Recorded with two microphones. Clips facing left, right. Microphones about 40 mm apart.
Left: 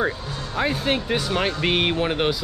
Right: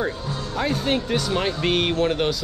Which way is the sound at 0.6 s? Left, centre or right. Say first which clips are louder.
Left 1 dB; centre.